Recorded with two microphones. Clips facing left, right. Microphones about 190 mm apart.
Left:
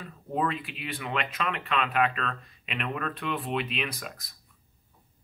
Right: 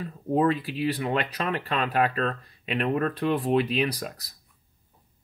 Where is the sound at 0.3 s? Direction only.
35° right (ahead or behind).